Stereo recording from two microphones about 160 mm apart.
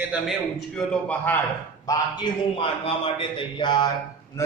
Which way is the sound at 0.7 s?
10° left (ahead or behind).